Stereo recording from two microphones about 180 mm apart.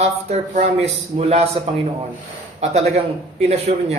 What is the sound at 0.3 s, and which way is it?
A man's voice, 35° right (ahead or behind).